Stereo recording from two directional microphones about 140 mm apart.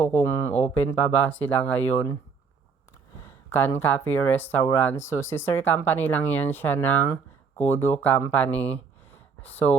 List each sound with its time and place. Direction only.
0.0 s speech: 55° left (ahead or behind)
0.7 s speech: 15° left (ahead or behind)
3.2 s a sound: 15° left (ahead or behind)
3.8 s speech: 15° left (ahead or behind)